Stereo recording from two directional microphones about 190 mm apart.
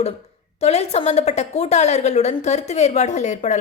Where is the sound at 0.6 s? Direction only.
35° left (ahead or behind).